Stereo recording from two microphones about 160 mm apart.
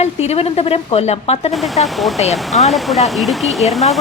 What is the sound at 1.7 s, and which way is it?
Speech, centre (ahead or behind).